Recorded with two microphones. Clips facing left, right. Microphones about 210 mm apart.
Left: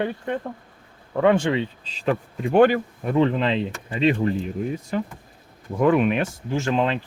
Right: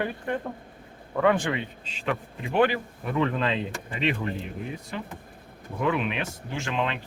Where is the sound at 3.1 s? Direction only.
30° left (ahead or behind).